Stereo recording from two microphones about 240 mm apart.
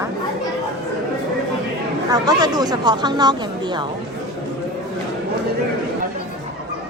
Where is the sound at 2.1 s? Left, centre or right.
Centre.